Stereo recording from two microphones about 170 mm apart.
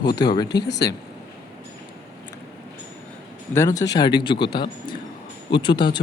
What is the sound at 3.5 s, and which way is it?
A man's voice, 20° left (ahead or behind).